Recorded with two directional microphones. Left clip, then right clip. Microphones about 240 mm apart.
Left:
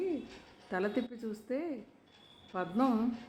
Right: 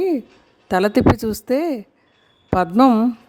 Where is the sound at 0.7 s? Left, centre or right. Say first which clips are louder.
Right 19 dB; right.